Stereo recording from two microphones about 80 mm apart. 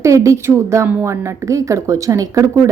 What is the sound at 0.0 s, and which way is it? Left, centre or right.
Speech, right.